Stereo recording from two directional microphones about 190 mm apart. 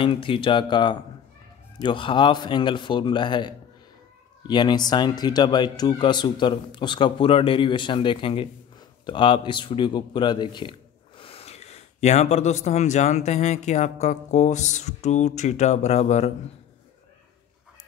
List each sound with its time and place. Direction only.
0.0 s speech: 25° left (ahead or behind)